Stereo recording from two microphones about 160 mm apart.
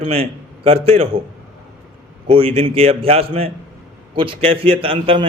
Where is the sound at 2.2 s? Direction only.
35° right (ahead or behind).